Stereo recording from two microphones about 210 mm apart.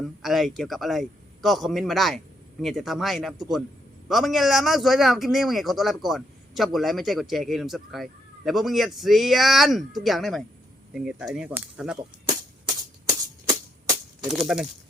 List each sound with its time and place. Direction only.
0.2 s speech: centre (ahead or behind)
13.5 s typewriter: 15° right (ahead or behind)
14.3 s speech: centre (ahead or behind)